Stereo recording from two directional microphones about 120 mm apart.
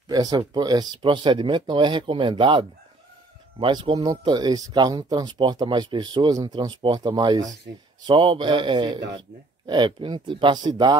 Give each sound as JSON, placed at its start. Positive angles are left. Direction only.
{"t": 0.1, "sound": "speech", "side_deg": -35}